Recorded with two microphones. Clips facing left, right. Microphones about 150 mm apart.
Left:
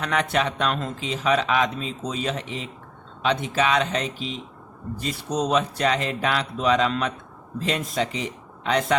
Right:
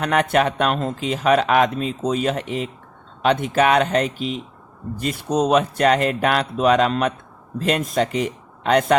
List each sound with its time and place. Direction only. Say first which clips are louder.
0.0 s a man's voice: right 5 dB; 55° right (ahead or behind)